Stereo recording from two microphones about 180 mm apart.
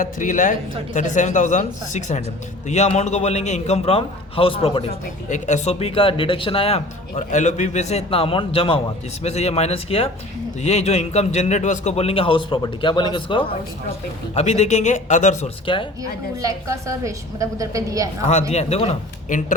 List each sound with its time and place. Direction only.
0.2 s speech: 45° left (ahead or behind)
15.6 s speech: 30° left (ahead or behind)
16.4 s a woman's voice: 15° right (ahead or behind)
18.3 s speech: 40° left (ahead or behind)